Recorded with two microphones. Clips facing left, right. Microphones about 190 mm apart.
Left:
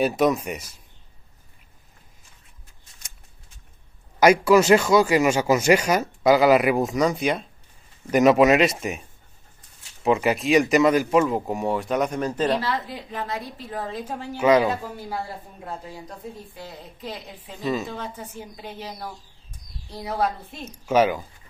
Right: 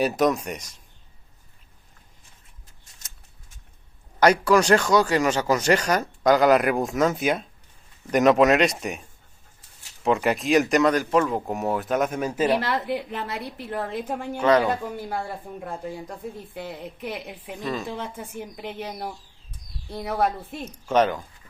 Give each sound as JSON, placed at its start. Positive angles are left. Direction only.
{"t": 0.0, "sound": "speech", "side_deg": 0}
{"t": 4.2, "sound": "speech", "side_deg": 10}
{"t": 10.0, "sound": "speech", "side_deg": 0}
{"t": 12.6, "sound": "a woman's voice", "side_deg": -60}
{"t": 14.3, "sound": "speech", "side_deg": 10}
{"t": 15.0, "sound": "a woman's voice", "side_deg": -55}
{"t": 20.7, "sound": "speech", "side_deg": 5}